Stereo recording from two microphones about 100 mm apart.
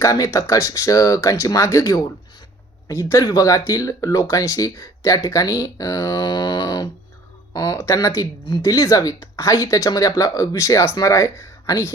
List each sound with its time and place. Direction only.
0.0 s speech: 35° left (ahead or behind)